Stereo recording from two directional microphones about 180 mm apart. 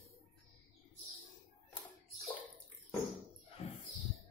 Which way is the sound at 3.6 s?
35° left (ahead or behind).